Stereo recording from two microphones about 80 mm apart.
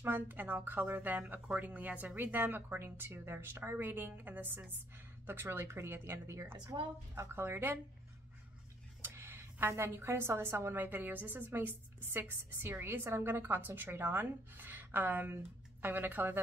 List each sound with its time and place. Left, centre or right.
0.0 s a woman's voice: right
9.0 s a woman's voice: right